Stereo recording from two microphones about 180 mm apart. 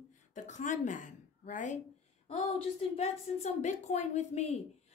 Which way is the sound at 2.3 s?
35° left (ahead or behind).